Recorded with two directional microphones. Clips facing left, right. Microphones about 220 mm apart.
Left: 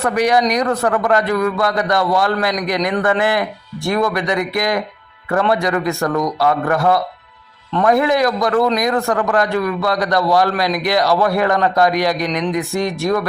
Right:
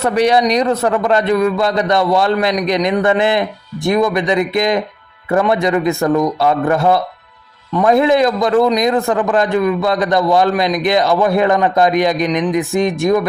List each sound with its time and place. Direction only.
0.0 s a man's voice: 25° right (ahead or behind)